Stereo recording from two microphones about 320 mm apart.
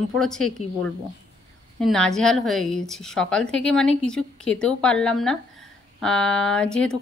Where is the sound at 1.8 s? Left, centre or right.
Centre.